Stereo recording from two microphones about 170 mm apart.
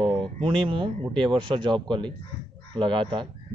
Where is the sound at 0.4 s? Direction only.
30° right (ahead or behind).